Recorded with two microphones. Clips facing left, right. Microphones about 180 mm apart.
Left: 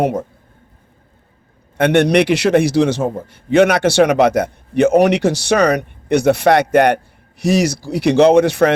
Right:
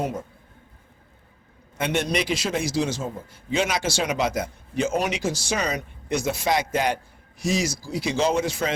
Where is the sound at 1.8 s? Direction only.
65° left (ahead or behind).